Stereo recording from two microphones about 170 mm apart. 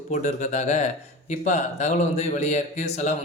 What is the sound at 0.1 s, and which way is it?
Speech, 45° left (ahead or behind).